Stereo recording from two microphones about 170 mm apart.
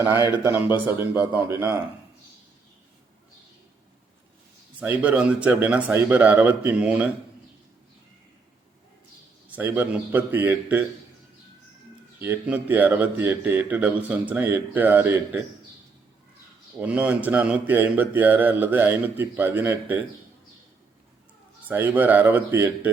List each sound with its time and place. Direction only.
1.1 s speech: 15° right (ahead or behind)
4.8 s speech: 10° right (ahead or behind)
9.5 s speech: 10° right (ahead or behind)
12.2 s speech: 10° right (ahead or behind)
16.8 s speech: 10° right (ahead or behind)
21.7 s speech: 10° right (ahead or behind)